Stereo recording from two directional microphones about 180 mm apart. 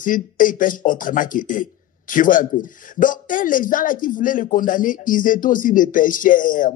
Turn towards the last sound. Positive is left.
turn(degrees=50)  # may be behind; listen again after turning